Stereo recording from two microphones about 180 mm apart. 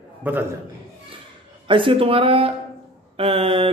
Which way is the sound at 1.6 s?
30° right (ahead or behind).